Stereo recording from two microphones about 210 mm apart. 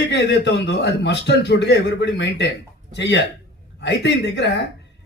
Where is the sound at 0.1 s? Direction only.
55° left (ahead or behind).